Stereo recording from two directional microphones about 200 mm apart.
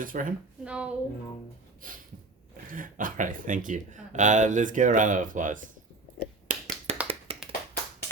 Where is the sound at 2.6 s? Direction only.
45° right (ahead or behind).